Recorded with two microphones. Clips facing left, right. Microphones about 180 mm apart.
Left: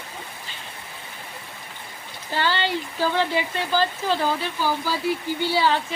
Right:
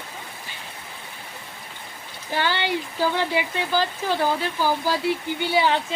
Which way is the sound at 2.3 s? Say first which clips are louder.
Even; 15° right (ahead or behind).